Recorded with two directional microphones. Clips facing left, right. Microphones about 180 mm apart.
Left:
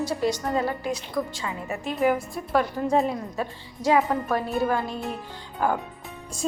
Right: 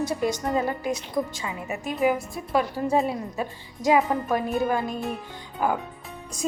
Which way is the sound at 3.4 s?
15° right (ahead or behind).